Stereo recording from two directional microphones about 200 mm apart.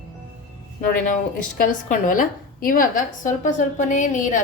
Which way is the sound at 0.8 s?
40° left (ahead or behind).